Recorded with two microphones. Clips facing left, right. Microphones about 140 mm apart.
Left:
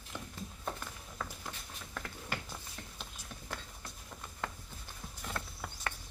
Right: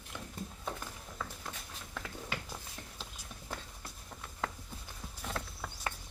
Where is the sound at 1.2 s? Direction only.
Centre (ahead or behind).